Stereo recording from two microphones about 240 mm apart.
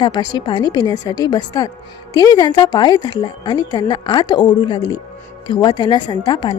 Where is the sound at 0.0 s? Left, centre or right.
Centre.